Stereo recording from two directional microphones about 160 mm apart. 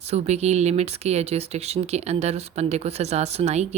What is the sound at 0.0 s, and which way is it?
A woman's voice, 40° right (ahead or behind).